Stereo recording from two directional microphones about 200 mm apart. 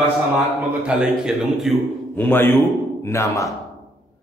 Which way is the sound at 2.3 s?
10° left (ahead or behind).